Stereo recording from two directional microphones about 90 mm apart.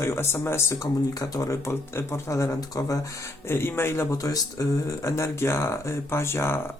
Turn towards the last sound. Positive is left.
turn(degrees=30)  # may be behind; listen again after turning